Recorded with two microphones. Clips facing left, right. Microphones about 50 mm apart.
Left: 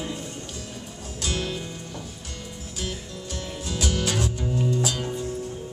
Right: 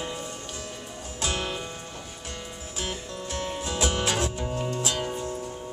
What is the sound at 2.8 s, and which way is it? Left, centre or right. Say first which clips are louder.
Music: right 1 dB; right.